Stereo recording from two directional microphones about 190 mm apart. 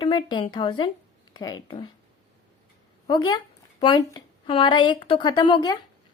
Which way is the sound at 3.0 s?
20° left (ahead or behind).